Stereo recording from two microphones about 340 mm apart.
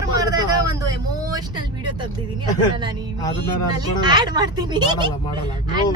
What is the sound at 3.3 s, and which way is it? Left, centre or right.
Speech, centre.